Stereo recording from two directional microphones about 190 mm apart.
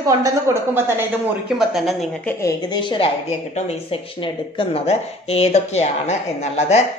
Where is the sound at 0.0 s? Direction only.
15° right (ahead or behind).